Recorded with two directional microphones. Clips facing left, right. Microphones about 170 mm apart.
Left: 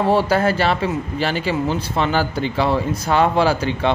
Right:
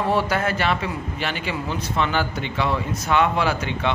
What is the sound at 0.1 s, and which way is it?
Speech, 35° left (ahead or behind).